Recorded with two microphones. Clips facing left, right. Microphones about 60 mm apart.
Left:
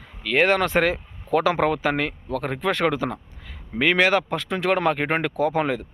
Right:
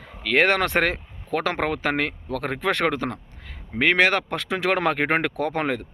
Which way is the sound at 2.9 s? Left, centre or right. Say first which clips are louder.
Left 1 dB; right.